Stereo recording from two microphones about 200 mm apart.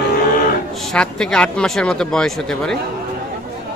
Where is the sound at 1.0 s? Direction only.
5° left (ahead or behind).